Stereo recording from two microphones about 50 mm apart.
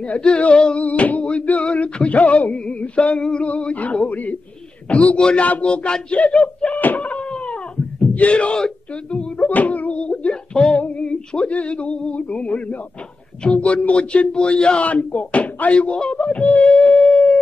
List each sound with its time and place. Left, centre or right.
0.0 s speech: left
0.8 s speech: left
3.2 s a sound: centre
3.4 s speech: left
9.5 s speech: left